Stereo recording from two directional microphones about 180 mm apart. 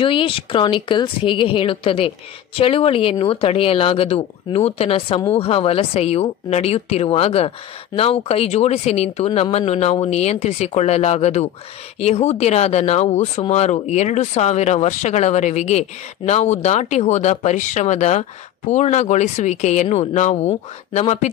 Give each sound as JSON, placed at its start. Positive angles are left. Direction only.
{"t": 0.0, "sound": "speech", "side_deg": 30}